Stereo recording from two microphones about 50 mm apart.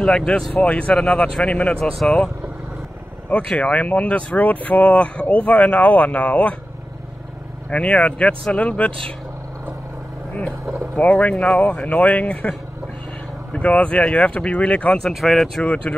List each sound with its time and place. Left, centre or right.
0.0 s speech: centre
0.6 s speech: left
3.3 s speech: left
7.7 s speech: left
11.0 s speech: left
15.0 s speech: centre
15.6 s speech: left